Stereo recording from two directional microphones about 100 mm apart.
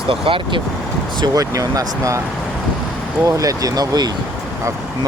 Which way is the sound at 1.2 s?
40° right (ahead or behind).